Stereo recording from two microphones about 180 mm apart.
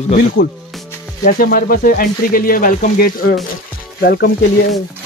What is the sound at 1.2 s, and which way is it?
Speech, 55° left (ahead or behind).